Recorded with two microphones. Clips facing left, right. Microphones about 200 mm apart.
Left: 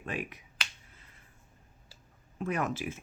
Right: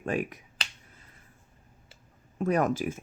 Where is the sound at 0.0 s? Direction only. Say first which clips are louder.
Right 7 dB; 45° right (ahead or behind).